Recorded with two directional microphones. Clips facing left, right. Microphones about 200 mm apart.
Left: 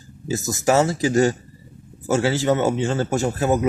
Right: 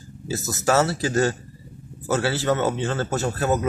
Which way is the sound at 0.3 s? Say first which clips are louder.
Left 3 dB; 15° left (ahead or behind).